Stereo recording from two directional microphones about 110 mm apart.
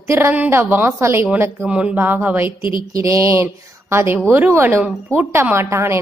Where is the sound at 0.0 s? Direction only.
20° right (ahead or behind).